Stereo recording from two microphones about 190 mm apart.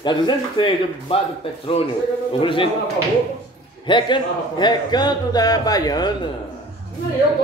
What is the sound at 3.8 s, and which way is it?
A man's voice, 25° left (ahead or behind).